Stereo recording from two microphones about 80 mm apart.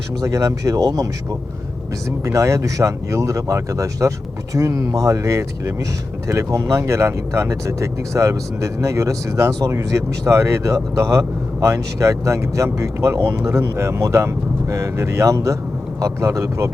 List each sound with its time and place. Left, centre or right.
0.2 s speech: right
2.0 s speech: right